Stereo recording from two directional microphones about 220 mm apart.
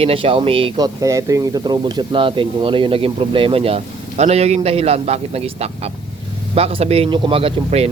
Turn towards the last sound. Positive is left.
turn(degrees=-25)  # may be behind; listen again after turning